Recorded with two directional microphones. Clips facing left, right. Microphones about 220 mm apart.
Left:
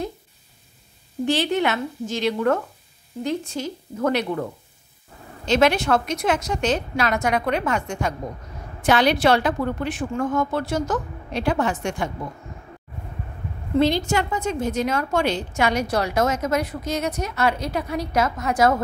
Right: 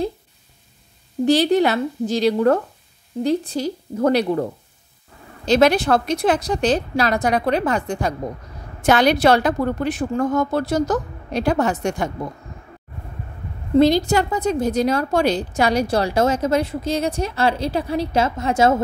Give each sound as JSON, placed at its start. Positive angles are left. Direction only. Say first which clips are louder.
{"t": 1.2, "sound": "a woman's voice", "louder": "right 6 dB", "side_deg": -40}
{"t": 13.7, "sound": "a woman's voice", "louder": "right 5 dB", "side_deg": -40}